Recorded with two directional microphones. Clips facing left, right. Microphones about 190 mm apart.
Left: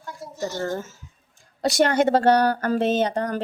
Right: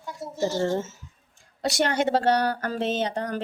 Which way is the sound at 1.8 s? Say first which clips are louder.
Left 5 dB; 45° left (ahead or behind).